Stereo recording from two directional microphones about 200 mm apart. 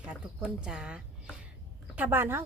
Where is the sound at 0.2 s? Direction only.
5° right (ahead or behind).